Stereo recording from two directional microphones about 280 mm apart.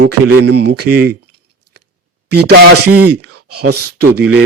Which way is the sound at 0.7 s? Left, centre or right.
Right.